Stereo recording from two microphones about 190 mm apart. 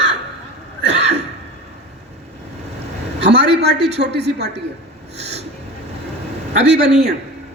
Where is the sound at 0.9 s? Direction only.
65° right (ahead or behind).